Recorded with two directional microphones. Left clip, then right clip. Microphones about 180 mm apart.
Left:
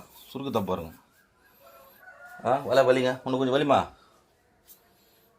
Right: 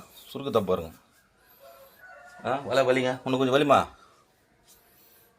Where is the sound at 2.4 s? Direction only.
20° left (ahead or behind).